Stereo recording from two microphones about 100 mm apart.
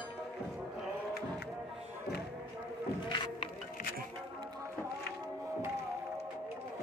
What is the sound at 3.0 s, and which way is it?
Music, 50° left (ahead or behind).